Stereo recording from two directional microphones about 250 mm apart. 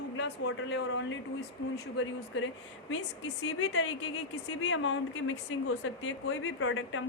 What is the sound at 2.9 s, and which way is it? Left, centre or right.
Speech, left.